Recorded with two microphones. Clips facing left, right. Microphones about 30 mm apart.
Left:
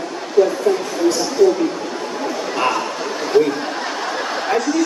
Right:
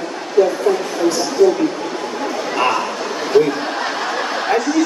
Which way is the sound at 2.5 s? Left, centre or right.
Centre.